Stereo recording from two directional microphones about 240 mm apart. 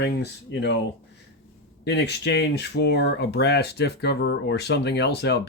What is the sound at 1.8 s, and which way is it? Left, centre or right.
Speech, left.